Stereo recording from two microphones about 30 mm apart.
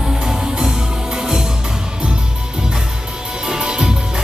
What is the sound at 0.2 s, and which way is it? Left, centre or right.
Music, right.